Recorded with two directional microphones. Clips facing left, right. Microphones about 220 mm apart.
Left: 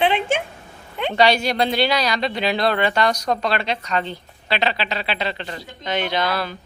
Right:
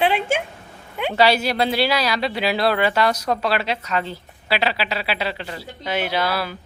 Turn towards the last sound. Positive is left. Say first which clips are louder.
# even
turn(degrees=-5)  # may be behind; listen again after turning